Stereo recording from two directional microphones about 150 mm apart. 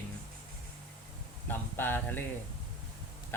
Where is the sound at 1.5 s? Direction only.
15° left (ahead or behind).